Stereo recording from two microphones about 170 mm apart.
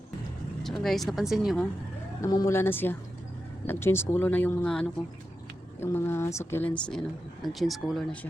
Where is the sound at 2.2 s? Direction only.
20° left (ahead or behind); by 8.1 s centre (ahead or behind).